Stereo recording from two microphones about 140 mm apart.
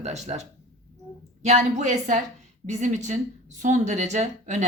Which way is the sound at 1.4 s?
55° right (ahead or behind).